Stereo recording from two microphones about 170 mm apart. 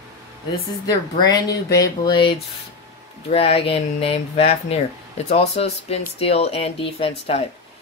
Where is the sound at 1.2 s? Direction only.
20° left (ahead or behind).